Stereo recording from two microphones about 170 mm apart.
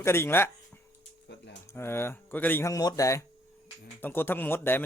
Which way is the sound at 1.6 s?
15° left (ahead or behind).